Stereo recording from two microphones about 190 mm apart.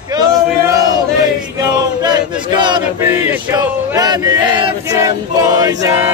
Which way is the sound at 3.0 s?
10° right (ahead or behind).